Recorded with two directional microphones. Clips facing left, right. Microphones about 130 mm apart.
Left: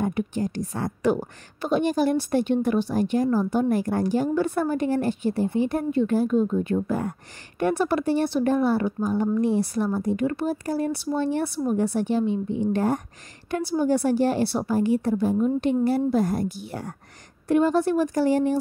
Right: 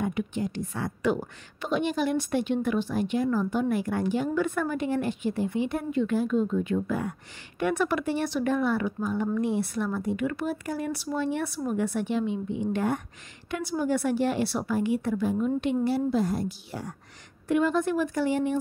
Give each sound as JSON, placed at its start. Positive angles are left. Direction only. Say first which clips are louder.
{"t": 0.0, "sound": "a woman's voice", "louder": "left 3 dB", "side_deg": 40}
{"t": 17.5, "sound": "a woman's voice", "louder": "left 4 dB", "side_deg": 35}